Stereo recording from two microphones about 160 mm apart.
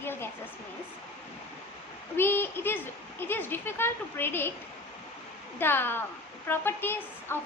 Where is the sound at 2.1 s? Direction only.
15° left (ahead or behind).